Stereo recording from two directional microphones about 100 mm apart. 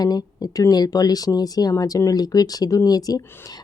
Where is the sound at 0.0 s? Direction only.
40° left (ahead or behind).